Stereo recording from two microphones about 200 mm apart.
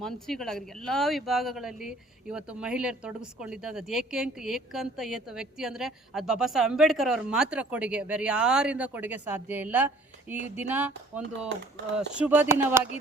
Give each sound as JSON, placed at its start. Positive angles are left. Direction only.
{"t": 0.0, "sound": "speech", "side_deg": 0}
{"t": 10.3, "sound": "a sound", "side_deg": 35}
{"t": 10.6, "sound": "speech", "side_deg": -10}
{"t": 12.2, "sound": "speech", "side_deg": -10}